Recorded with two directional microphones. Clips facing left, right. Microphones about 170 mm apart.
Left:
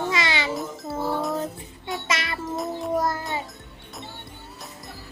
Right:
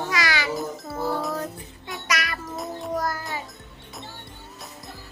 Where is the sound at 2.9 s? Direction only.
25° left (ahead or behind).